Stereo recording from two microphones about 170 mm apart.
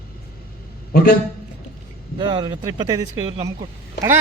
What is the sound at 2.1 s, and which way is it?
Speech, 30° right (ahead or behind).